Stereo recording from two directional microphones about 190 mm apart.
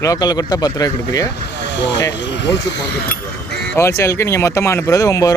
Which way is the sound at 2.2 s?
65° left (ahead or behind).